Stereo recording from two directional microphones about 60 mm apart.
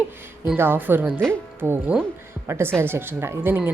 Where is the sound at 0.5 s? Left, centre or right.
Right.